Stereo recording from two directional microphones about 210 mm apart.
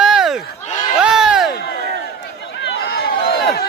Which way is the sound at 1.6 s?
50° left (ahead or behind).